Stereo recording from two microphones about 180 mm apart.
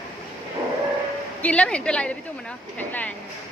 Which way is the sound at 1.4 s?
5° left (ahead or behind).